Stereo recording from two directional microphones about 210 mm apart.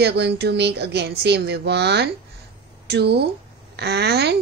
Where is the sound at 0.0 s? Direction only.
50° right (ahead or behind).